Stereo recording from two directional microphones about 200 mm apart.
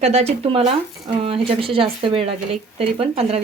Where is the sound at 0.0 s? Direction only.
30° right (ahead or behind).